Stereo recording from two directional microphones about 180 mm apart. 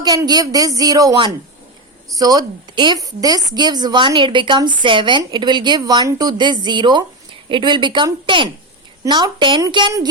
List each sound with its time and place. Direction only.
0.0 s a woman's voice: 20° right (ahead or behind)